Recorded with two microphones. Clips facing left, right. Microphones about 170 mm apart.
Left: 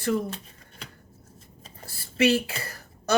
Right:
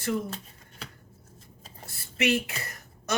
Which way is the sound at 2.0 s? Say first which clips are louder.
Left 4 dB; 30° left (ahead or behind).